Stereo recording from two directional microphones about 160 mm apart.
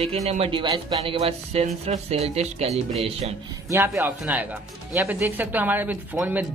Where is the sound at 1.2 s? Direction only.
40° right (ahead or behind).